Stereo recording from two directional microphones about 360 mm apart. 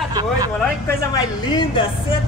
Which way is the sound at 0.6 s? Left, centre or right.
Centre.